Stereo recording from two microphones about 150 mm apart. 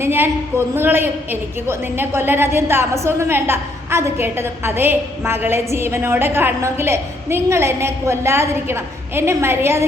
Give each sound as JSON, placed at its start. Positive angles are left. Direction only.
{"t": 0.0, "sound": "a woman's voice", "side_deg": -15}